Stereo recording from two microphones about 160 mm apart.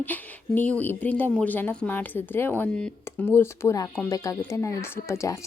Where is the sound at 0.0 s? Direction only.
10° left (ahead or behind).